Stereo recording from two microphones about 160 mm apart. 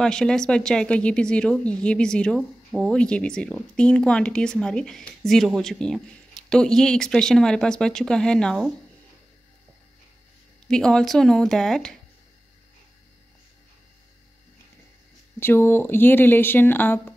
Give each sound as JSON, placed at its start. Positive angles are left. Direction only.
{"t": 0.0, "sound": "speech", "side_deg": 5}
{"t": 10.7, "sound": "speech", "side_deg": 5}
{"t": 15.3, "sound": "speech", "side_deg": 15}